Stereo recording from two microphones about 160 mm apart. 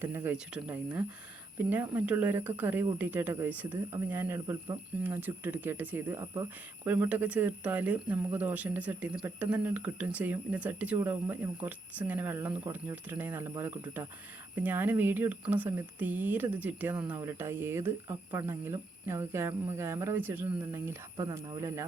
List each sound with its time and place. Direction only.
0.0 s speech: 15° right (ahead or behind)
4.4 s speech: 20° right (ahead or behind)